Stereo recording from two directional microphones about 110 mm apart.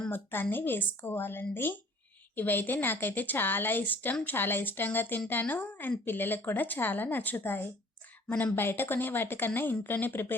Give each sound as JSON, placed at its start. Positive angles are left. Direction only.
{"t": 0.1, "sound": "a woman's voice", "side_deg": 20}